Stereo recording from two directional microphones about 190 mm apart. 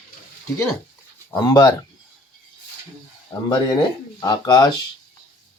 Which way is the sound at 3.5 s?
20° left (ahead or behind).